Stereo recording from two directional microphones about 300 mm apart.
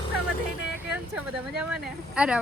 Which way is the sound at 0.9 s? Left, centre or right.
Centre.